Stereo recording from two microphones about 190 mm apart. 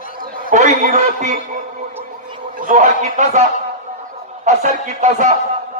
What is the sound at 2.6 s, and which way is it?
A man's voice, 40° right (ahead or behind).